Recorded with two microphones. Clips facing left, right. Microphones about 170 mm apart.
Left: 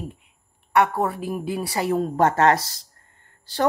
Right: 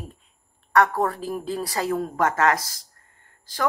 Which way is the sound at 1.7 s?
25° left (ahead or behind).